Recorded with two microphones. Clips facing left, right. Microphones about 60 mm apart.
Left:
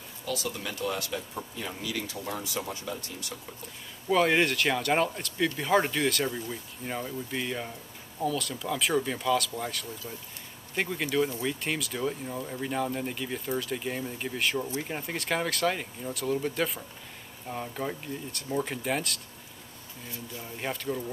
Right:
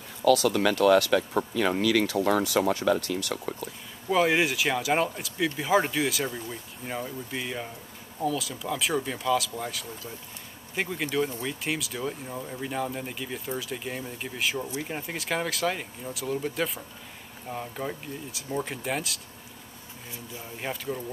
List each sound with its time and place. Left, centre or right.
0.2 s speech: right
4.1 s speech: centre
20.4 s speech: centre